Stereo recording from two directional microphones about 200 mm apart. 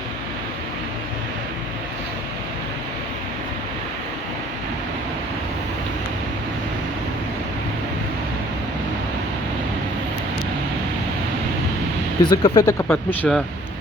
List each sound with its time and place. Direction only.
12.2 s speech: 20° left (ahead or behind)
12.9 s speech: centre (ahead or behind)